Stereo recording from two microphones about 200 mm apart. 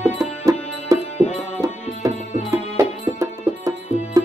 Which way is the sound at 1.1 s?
30° left (ahead or behind).